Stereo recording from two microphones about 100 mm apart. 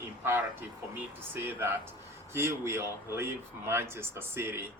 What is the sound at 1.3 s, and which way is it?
Speech, 20° right (ahead or behind).